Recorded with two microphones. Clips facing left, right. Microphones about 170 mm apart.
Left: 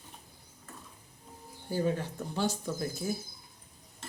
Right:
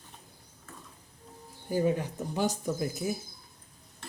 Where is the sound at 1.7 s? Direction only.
15° right (ahead or behind).